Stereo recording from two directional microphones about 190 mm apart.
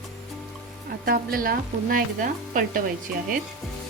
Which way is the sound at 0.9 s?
50° right (ahead or behind).